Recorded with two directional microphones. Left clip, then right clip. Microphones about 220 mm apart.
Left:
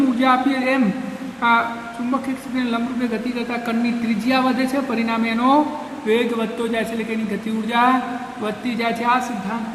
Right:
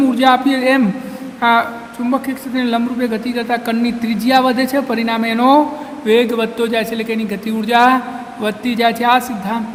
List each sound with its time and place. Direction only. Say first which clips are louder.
0.2 s a woman's voice: right 6 dB; 35° right (ahead or behind)